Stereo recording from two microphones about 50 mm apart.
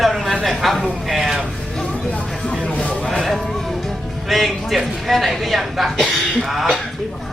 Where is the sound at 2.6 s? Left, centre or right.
Left.